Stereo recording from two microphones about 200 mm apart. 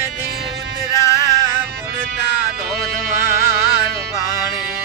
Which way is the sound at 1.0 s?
15° left (ahead or behind).